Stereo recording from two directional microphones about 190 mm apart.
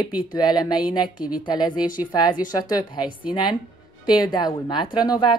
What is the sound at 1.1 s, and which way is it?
Speech, 5° right (ahead or behind).